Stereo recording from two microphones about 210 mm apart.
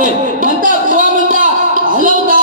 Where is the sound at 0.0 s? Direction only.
40° right (ahead or behind).